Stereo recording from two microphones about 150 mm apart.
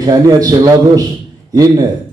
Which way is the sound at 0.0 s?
25° right (ahead or behind).